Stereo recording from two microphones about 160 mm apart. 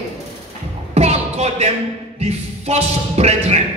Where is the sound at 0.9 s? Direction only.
40° right (ahead or behind).